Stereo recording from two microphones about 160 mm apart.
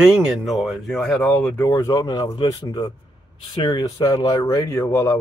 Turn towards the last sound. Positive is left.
turn(degrees=15)  # may be behind; listen again after turning